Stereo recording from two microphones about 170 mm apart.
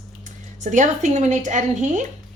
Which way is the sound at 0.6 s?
45° right (ahead or behind).